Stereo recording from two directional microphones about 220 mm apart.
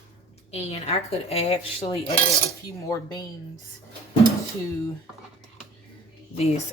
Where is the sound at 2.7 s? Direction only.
15° left (ahead or behind).